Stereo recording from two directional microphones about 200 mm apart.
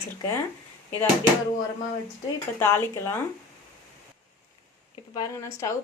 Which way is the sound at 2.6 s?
10° left (ahead or behind).